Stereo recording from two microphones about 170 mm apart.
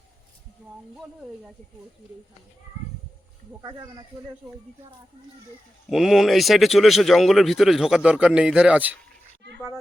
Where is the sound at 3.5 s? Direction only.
20° right (ahead or behind).